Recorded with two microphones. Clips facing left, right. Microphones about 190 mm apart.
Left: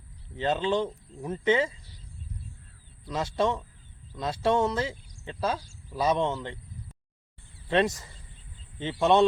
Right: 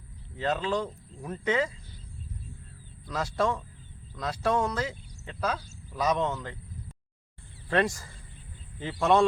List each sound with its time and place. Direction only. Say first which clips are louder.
0.3 s speech: left 2 dB; 25° left (ahead or behind)
3.1 s speech: left 1 dB; 25° left (ahead or behind)
8.8 s speech: left 1 dB; 25° left (ahead or behind)